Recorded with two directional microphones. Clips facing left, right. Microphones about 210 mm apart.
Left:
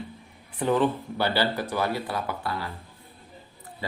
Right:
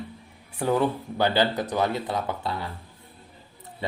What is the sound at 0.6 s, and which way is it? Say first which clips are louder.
Speech: even; 10° right (ahead or behind).